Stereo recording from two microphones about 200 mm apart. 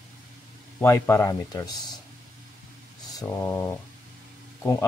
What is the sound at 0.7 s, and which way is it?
Speech, 15° left (ahead or behind).